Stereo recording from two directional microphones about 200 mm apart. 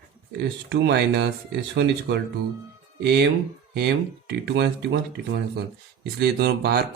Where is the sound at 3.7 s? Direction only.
55° right (ahead or behind).